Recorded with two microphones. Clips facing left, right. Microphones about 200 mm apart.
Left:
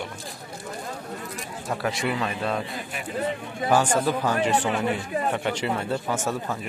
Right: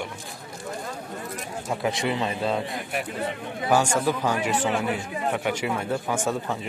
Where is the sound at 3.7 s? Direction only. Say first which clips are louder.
Even; 10° right (ahead or behind).